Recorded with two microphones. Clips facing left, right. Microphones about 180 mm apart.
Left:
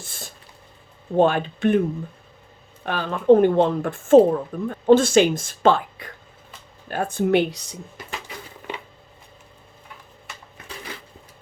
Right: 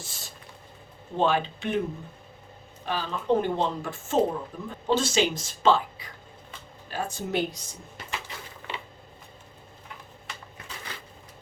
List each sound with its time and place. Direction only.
0.0 s a sound: 55° left (ahead or behind)
1.1 s speech: 50° left (ahead or behind)
2.8 s speech: 60° left (ahead or behind)